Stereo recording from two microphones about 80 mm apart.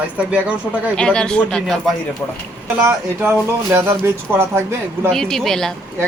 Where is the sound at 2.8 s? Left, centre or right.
Right.